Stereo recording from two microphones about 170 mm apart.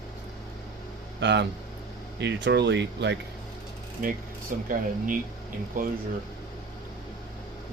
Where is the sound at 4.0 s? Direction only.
55° right (ahead or behind).